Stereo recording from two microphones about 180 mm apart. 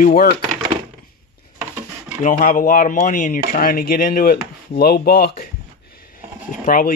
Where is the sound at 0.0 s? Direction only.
55° left (ahead or behind).